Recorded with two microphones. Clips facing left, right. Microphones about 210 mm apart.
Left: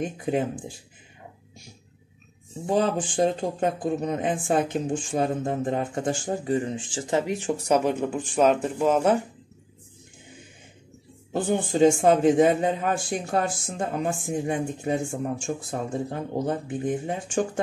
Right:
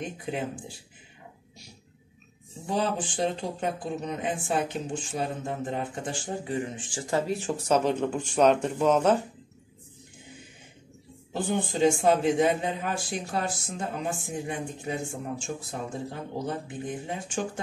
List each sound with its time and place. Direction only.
0.0 s speech: 45° left (ahead or behind)
2.7 s speech: 45° left (ahead or behind); by 9.2 s 10° left (ahead or behind)
11.3 s speech: 45° left (ahead or behind)